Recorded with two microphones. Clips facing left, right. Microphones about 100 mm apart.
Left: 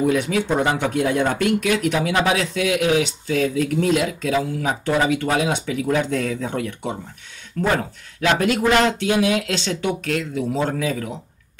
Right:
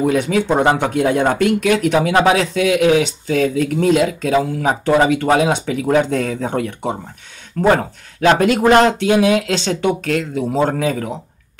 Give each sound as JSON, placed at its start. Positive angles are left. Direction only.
{"t": 0.0, "sound": "speech", "side_deg": -50}
{"t": 4.4, "sound": "speech", "side_deg": -55}
{"t": 7.7, "sound": "speech", "side_deg": -40}